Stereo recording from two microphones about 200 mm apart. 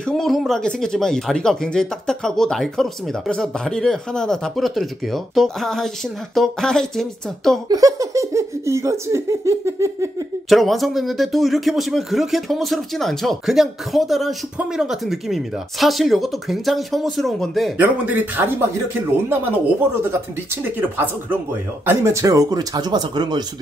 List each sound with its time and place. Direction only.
0.0 s speech: centre (ahead or behind)
7.6 s speech: 15° right (ahead or behind)
10.5 s speech: centre (ahead or behind); by 23.4 s 20° right (ahead or behind)